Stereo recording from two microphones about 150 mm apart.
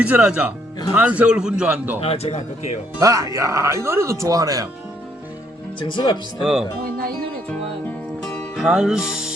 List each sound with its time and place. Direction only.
0.0 s a man's voice: 10° right (ahead or behind)
2.0 s speech: 40° left (ahead or behind)
3.0 s speech: 20° right (ahead or behind)
5.8 s speech: 30° left (ahead or behind)
6.4 s music: centre (ahead or behind)
8.5 s speech: 5° right (ahead or behind)